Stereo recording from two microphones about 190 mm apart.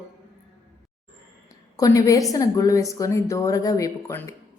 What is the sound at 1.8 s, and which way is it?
A woman's voice, 20° left (ahead or behind).